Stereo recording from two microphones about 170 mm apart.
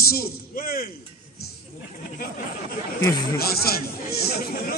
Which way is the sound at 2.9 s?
15° left (ahead or behind).